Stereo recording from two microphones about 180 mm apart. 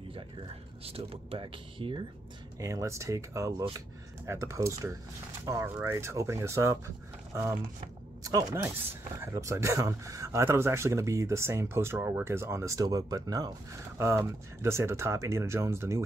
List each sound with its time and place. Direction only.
0.8 s speech: 35° right (ahead or behind)
2.6 s speech: 15° right (ahead or behind)
8.2 s speech: 20° right (ahead or behind)